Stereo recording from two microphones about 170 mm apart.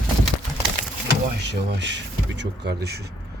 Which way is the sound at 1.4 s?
90° right.